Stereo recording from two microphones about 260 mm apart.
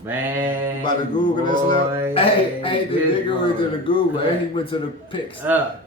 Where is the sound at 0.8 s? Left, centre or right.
Centre.